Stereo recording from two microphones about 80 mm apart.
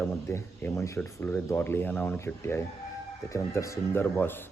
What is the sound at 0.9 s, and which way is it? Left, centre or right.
Speech, centre.